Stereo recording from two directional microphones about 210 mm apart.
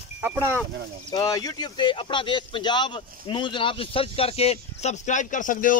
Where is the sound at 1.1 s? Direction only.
20° left (ahead or behind).